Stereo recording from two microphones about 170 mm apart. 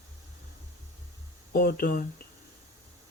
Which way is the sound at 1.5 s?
60° left (ahead or behind).